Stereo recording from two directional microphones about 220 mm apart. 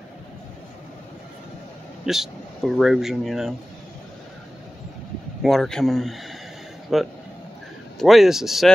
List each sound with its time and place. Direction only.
2.0 s speech: centre (ahead or behind)
5.4 s speech: centre (ahead or behind)